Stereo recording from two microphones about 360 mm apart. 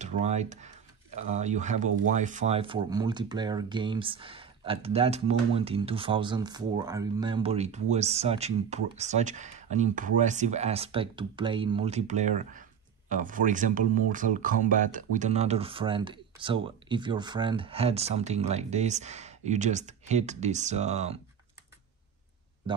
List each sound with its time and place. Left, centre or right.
0.0 s speech: centre
22.7 s speech: centre